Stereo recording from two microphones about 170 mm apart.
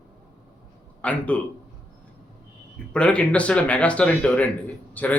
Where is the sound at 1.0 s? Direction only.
10° left (ahead or behind).